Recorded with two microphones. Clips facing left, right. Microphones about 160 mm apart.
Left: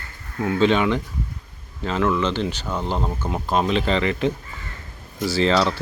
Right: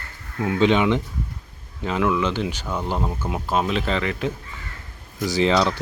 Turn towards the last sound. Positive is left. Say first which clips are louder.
# even
turn(degrees=-15)  # may be behind; listen again after turning